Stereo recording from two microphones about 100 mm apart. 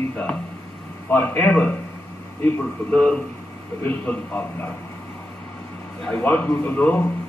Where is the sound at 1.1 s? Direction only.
20° left (ahead or behind).